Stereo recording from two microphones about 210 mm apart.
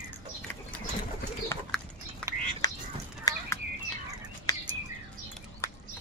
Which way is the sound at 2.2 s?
5° left (ahead or behind).